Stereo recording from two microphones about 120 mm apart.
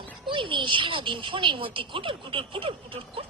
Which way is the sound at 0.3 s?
45° right (ahead or behind).